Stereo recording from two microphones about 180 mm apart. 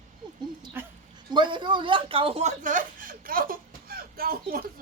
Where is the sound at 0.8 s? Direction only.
10° right (ahead or behind).